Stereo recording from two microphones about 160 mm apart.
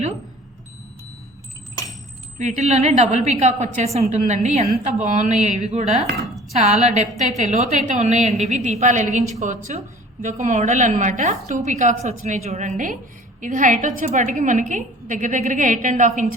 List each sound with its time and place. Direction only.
2.4 s a woman's voice: 50° right (ahead or behind)